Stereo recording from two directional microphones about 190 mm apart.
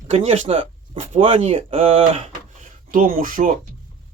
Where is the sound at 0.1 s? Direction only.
35° right (ahead or behind).